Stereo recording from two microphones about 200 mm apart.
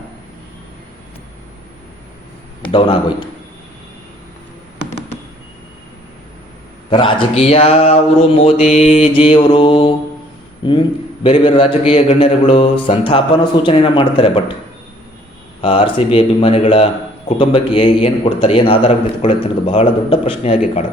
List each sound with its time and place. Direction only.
6.9 s a man's voice: 25° left (ahead or behind)
15.6 s a man's voice: 25° left (ahead or behind)